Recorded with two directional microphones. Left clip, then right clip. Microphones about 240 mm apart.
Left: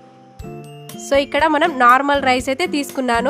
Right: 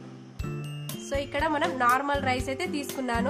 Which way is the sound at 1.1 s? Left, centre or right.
Left.